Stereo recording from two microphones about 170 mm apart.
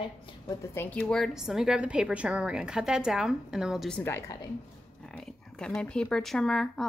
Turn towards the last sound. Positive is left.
turn(degrees=0)  # may be behind; listen again after turning